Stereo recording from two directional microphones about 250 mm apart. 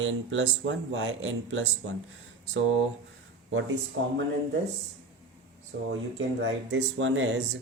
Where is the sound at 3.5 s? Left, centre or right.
Right.